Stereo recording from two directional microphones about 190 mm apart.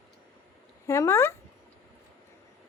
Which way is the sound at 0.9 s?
15° left (ahead or behind).